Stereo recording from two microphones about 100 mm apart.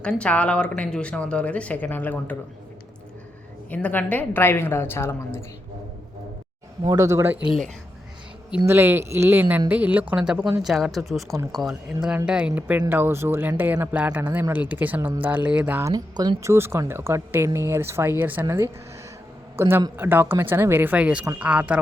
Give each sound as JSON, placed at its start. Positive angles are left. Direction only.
{"t": 0.0, "sound": "speech", "side_deg": 10}
{"t": 3.7, "sound": "a woman's voice", "side_deg": 15}
{"t": 6.8, "sound": "a man's voice", "side_deg": -35}
{"t": 8.6, "sound": "speech", "side_deg": -25}
{"t": 15.8, "sound": "speech", "side_deg": -40}
{"t": 16.4, "sound": "speech", "side_deg": -25}